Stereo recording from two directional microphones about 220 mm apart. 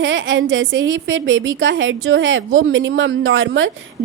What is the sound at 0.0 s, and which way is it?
A woman's voice, 60° right (ahead or behind).